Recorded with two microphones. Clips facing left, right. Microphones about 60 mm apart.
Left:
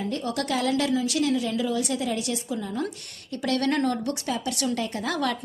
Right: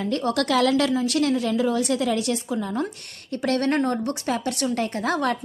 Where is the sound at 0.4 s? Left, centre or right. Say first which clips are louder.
Right 4 dB; right.